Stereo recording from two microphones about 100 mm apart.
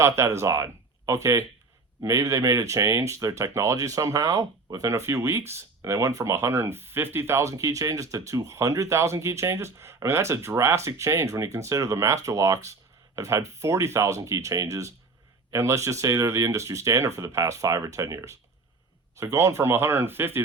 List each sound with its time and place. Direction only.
0.0 s speech: 30° right (ahead or behind)